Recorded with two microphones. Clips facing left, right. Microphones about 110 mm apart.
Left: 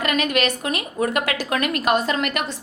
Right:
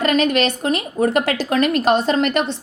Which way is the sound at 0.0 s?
30° right (ahead or behind).